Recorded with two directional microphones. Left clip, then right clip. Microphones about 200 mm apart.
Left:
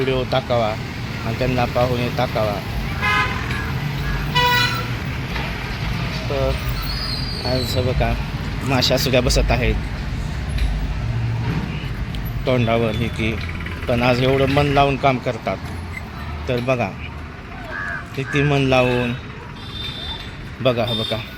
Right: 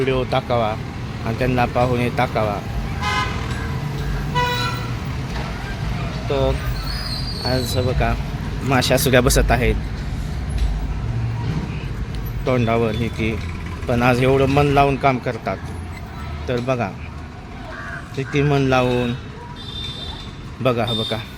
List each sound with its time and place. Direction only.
0.0 s a man's voice: centre (ahead or behind)
6.3 s speech: 25° right (ahead or behind)
7.4 s speech: 10° right (ahead or behind)
8.7 s speech: 15° right (ahead or behind)
9.5 s a man's voice: 10° right (ahead or behind)
12.5 s a man's voice: centre (ahead or behind)
18.2 s speech: 5° right (ahead or behind)
20.7 s speech: 5° right (ahead or behind)